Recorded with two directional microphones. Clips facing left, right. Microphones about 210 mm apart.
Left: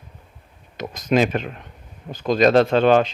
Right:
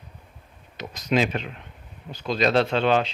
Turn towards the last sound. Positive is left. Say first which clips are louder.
# left 6 dB
turn(degrees=50)  # may be behind; listen again after turning